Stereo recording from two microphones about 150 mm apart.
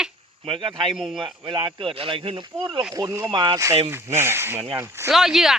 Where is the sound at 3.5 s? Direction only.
20° right (ahead or behind).